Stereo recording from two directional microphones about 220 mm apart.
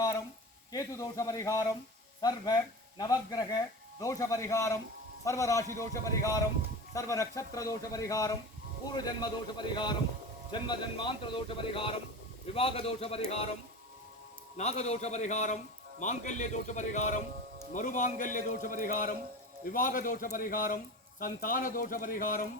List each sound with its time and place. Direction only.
0.7 s a man's voice: 15° left (ahead or behind)
14.5 s speech: 30° left (ahead or behind)